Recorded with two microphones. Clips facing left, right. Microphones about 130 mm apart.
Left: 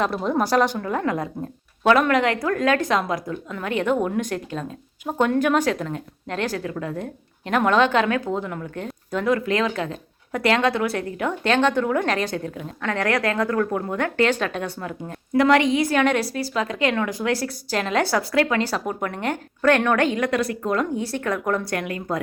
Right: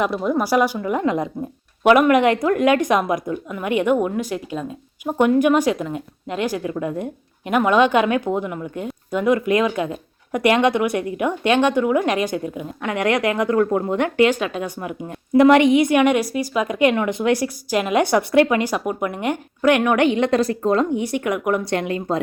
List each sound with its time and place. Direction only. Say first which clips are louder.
0.3 s a woman's voice: right 1 dB; 10° right (ahead or behind); by 22.2 s 25° right (ahead or behind)